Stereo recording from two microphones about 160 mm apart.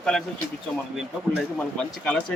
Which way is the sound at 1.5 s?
5° left (ahead or behind).